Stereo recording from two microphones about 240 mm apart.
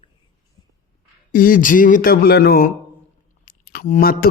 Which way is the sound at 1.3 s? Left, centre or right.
Left.